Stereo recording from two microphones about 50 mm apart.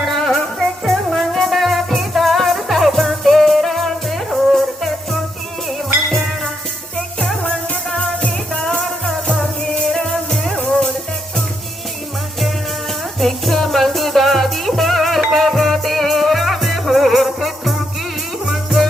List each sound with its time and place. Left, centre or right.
0.0 s music: centre
9.2 s music: centre
13.1 s music: centre